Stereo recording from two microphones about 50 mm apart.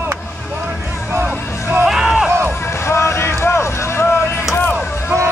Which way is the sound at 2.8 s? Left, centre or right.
Left.